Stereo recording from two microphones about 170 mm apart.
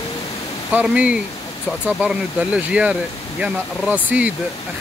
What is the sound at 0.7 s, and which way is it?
Speech, 5° right (ahead or behind).